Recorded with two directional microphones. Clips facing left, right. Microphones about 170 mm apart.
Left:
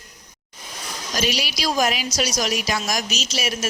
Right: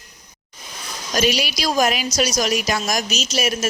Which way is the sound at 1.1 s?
55° right (ahead or behind).